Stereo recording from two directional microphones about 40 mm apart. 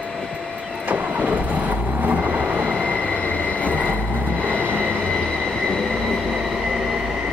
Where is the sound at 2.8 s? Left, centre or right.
Left.